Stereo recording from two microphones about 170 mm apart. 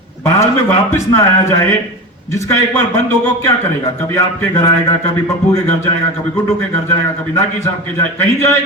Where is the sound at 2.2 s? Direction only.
15° left (ahead or behind).